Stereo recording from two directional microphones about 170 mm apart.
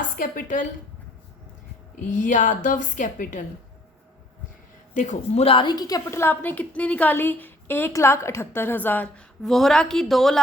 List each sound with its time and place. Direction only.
0.2 s a woman's voice: 55° left (ahead or behind)
2.0 s a woman's voice: 50° left (ahead or behind)
4.9 s a woman's voice: 40° left (ahead or behind); by 10.4 s centre (ahead or behind)